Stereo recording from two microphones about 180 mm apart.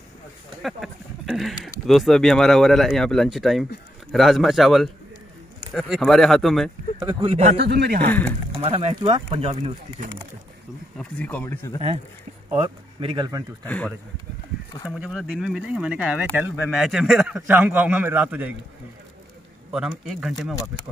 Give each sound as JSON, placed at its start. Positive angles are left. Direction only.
{"t": 0.6, "sound": "speech", "side_deg": 0}
{"t": 7.0, "sound": "speech", "side_deg": -25}
{"t": 7.6, "sound": "speech", "side_deg": -60}
{"t": 8.5, "sound": "speech", "side_deg": -30}
{"t": 11.0, "sound": "speech", "side_deg": 10}
{"t": 12.4, "sound": "speech", "side_deg": -30}
{"t": 13.7, "sound": "speech", "side_deg": 5}
{"t": 14.9, "sound": "a man's voice", "side_deg": -5}
{"t": 19.7, "sound": "speech", "side_deg": -5}